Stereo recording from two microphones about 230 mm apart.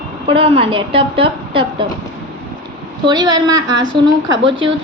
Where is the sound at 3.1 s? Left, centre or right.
Centre.